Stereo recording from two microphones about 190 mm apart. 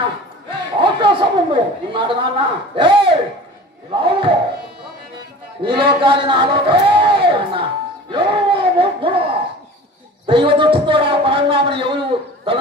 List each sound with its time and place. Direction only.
0.7 s speech: 25° right (ahead or behind)
5.6 s speech: 25° right (ahead or behind)